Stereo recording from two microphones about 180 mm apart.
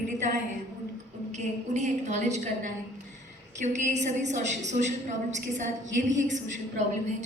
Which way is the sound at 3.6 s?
40° right (ahead or behind).